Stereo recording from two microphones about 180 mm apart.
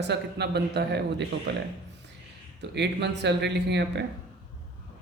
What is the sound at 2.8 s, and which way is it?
Speech, 70° right (ahead or behind).